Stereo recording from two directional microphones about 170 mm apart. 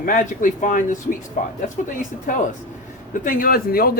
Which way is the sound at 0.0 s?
50° left (ahead or behind).